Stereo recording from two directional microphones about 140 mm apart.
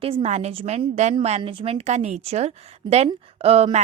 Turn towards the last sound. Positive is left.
turn(degrees=-50)  # may be behind; listen again after turning